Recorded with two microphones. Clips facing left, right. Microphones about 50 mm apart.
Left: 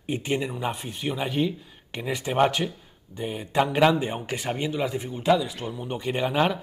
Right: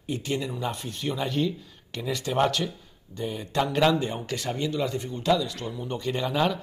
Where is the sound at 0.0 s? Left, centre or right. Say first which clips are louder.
Left 2 dB; left.